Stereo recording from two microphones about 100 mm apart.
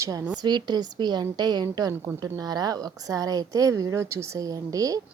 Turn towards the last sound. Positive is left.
turn(degrees=-35)  # may be behind; listen again after turning